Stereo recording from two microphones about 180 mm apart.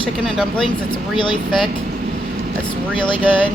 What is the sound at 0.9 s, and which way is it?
Speech, 25° left (ahead or behind).